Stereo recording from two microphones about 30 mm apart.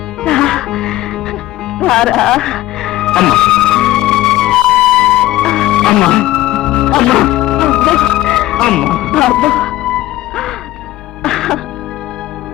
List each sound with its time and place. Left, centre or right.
0.2 s music: centre
7.3 s organ: left
7.9 s music: left
11.2 s music: centre